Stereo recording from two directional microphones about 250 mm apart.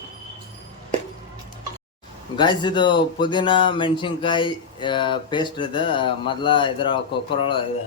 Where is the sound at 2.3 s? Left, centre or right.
Centre.